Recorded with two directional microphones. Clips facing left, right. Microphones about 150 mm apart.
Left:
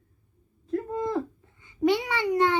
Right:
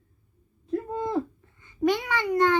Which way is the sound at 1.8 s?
15° left (ahead or behind).